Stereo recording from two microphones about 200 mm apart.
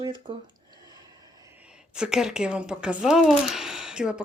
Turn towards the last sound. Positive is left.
turn(degrees=-5)  # may be behind; listen again after turning